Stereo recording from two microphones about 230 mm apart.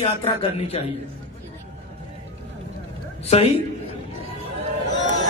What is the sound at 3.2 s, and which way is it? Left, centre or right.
Speech, left.